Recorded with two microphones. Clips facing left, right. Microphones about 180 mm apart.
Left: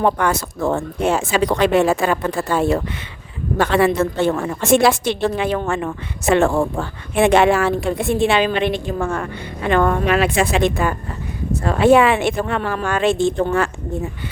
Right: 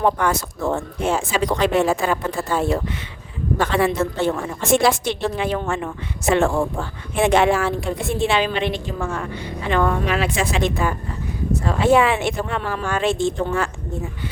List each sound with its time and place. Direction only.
0.0 s a woman's voice: 65° left (ahead or behind)